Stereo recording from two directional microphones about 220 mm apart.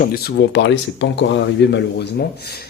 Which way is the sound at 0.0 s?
45° left (ahead or behind).